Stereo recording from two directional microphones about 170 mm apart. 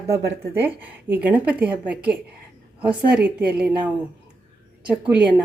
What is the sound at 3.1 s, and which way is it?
Speech, 10° right (ahead or behind).